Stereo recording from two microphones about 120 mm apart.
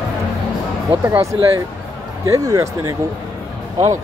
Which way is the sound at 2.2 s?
30° right (ahead or behind).